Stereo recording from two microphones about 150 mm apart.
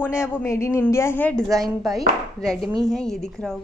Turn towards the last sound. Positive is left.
turn(degrees=5)  # may be behind; listen again after turning